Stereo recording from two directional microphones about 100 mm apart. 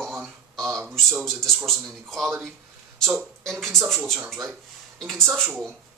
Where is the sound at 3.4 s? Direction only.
5° left (ahead or behind).